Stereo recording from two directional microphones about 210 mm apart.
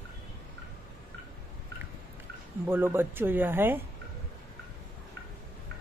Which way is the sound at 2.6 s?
10° right (ahead or behind).